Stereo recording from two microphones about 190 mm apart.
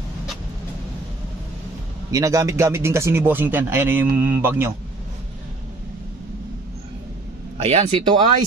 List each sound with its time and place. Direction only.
2.0 s speech: 15° right (ahead or behind)
7.5 s speech: 30° right (ahead or behind)